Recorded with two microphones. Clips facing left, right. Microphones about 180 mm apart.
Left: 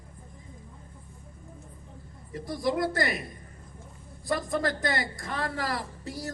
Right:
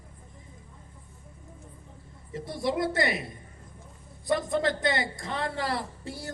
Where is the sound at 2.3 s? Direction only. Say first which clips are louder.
Left 1 dB; 25° right (ahead or behind).